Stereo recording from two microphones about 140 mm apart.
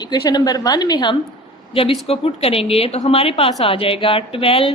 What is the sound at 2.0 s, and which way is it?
A woman's voice, 45° left (ahead or behind).